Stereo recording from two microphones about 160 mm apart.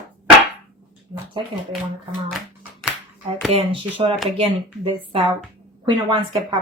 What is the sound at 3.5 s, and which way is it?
A woman's voice, 35° right (ahead or behind).